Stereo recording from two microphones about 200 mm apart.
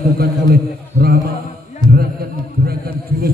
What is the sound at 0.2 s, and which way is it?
Speech, 50° right (ahead or behind).